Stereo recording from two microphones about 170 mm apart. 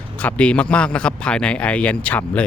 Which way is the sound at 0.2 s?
10° left (ahead or behind).